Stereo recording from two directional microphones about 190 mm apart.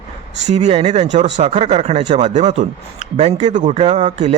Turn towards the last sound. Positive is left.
turn(degrees=-40)  # may be behind; listen again after turning